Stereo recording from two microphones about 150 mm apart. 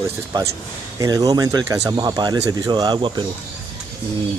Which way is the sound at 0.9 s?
25° right (ahead or behind).